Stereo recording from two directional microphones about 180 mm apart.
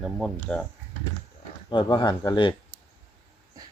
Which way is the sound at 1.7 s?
25° left (ahead or behind).